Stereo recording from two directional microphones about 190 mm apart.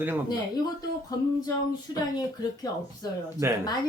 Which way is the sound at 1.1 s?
20° left (ahead or behind).